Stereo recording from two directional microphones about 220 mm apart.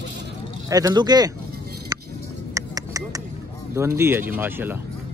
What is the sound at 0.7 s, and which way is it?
Speech, 15° right (ahead or behind).